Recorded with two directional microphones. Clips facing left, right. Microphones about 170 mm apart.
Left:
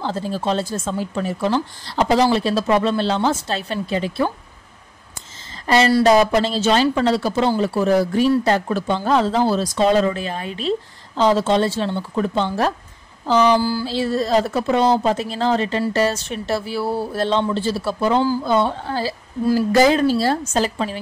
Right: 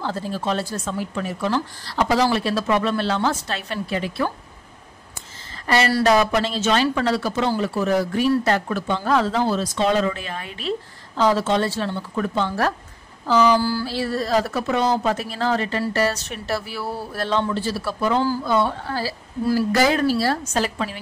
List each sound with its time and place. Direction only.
0.0 s speech: 25° left (ahead or behind)
5.7 s speech: 20° left (ahead or behind)